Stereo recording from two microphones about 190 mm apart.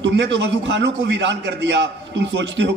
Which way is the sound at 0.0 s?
65° right (ahead or behind).